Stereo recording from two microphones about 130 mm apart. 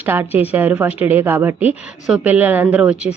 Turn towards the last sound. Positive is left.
turn(degrees=-10)  # may be behind; listen again after turning